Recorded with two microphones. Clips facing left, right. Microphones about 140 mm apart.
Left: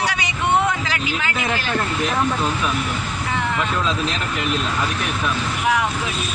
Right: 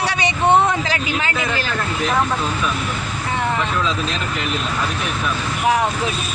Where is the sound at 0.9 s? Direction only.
35° right (ahead or behind).